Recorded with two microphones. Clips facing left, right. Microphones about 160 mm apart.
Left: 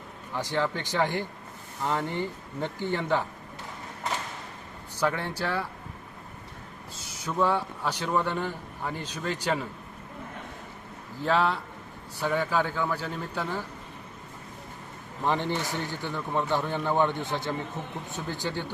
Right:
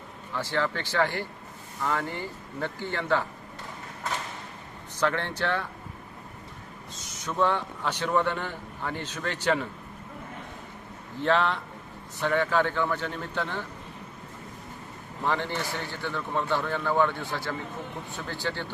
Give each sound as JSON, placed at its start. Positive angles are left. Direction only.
{"t": 0.3, "sound": "speech", "side_deg": 15}
{"t": 4.9, "sound": "speech", "side_deg": 10}
{"t": 7.3, "sound": "speech", "side_deg": 10}
{"t": 11.2, "sound": "speech", "side_deg": 5}
{"t": 15.2, "sound": "speech", "side_deg": 15}